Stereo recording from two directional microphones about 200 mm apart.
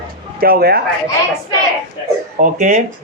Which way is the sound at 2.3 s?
40° right (ahead or behind).